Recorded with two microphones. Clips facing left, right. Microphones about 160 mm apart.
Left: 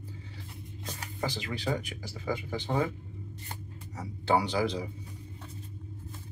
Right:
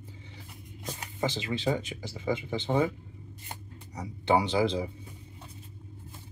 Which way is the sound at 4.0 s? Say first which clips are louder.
Right 2 dB; 20° right (ahead or behind).